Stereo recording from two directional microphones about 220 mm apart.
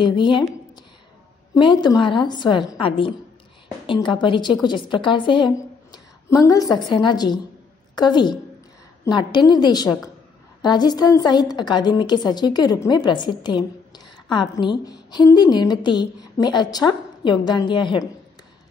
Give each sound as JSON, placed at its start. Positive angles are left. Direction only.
{"t": 0.0, "sound": "a woman's voice", "side_deg": 20}
{"t": 1.5, "sound": "a woman's voice", "side_deg": 20}